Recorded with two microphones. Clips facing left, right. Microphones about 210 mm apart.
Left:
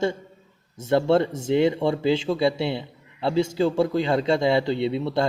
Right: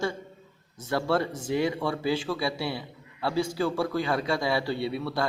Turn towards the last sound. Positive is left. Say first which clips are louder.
# left 6 dB
turn(degrees=25)  # may be behind; listen again after turning